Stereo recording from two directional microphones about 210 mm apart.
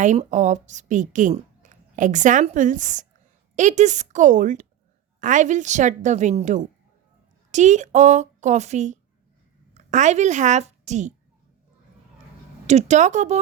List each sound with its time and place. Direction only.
0.0 s a woman's voice: 35° right (ahead or behind)
12.6 s a woman's voice: 35° right (ahead or behind)